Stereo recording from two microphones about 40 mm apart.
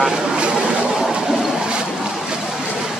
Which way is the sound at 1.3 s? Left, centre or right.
Centre.